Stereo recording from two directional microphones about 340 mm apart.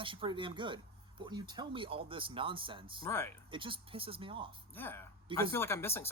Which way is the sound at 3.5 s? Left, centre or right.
Centre.